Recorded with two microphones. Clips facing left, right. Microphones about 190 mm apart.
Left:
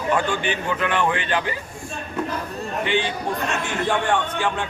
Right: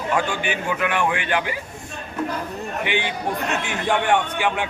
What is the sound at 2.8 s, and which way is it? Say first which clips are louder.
A man's voice: left 2 dB; 15° right (ahead or behind).